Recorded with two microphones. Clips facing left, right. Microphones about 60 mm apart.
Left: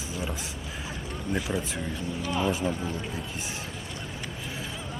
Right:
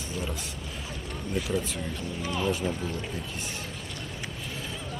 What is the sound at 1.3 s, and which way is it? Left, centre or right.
Speech, centre.